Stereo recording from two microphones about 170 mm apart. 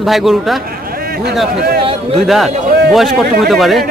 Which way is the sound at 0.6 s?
60° right (ahead or behind).